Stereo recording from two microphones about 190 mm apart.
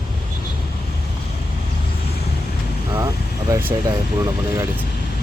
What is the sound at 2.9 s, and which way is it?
Speech, 15° right (ahead or behind).